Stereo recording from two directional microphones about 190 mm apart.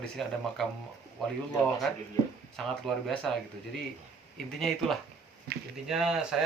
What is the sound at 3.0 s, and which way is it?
Speech, centre (ahead or behind).